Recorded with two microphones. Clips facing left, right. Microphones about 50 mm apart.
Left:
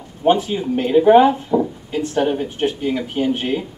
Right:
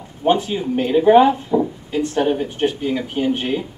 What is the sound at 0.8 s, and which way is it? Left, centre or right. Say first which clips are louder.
Speech: left 1 dB; centre.